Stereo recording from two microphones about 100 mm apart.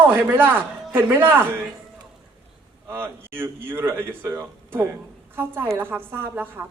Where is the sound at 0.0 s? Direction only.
20° right (ahead or behind).